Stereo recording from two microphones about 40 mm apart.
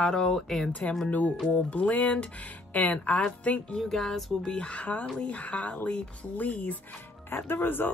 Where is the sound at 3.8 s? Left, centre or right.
Centre.